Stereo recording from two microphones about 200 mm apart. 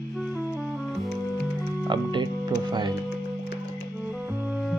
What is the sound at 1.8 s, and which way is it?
Music, 20° right (ahead or behind).